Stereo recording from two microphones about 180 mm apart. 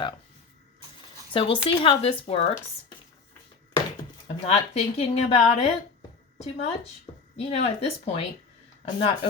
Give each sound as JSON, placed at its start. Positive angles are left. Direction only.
{"t": 1.3, "sound": "speech", "side_deg": 30}
{"t": 4.4, "sound": "speech", "side_deg": 35}